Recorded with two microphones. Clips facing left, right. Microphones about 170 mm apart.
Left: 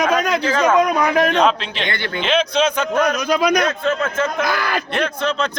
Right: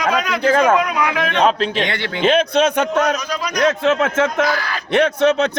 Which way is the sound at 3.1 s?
60° left (ahead or behind).